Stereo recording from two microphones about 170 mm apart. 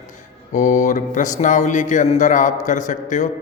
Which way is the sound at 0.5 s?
45° left (ahead or behind).